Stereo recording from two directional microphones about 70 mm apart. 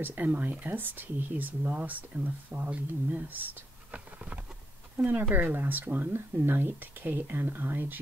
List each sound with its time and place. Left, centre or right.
0.0 s speech: right